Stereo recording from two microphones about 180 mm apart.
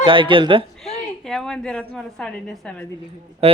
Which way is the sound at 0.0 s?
30° right (ahead or behind).